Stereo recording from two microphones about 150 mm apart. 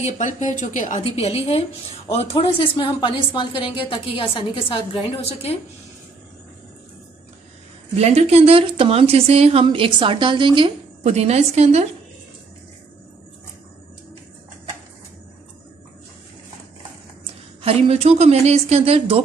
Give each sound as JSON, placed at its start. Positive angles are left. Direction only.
{"t": 0.0, "sound": "a woman's voice", "side_deg": 55}
{"t": 7.9, "sound": "a woman's voice", "side_deg": -45}
{"t": 11.1, "sound": "speech", "side_deg": -45}
{"t": 17.6, "sound": "speech", "side_deg": -40}